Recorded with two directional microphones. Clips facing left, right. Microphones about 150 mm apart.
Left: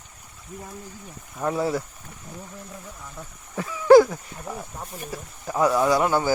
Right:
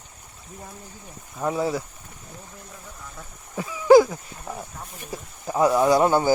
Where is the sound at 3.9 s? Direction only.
5° right (ahead or behind).